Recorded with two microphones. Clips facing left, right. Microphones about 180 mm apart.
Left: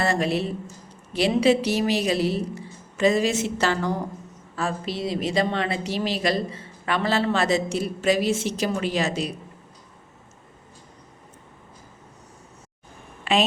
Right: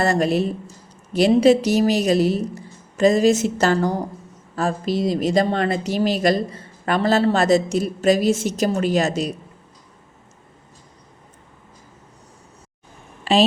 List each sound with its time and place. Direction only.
0.0 s a woman's voice: 45° right (ahead or behind)
13.3 s a woman's voice: 35° right (ahead or behind)